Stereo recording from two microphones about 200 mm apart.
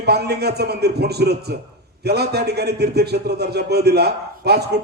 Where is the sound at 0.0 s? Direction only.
55° right (ahead or behind).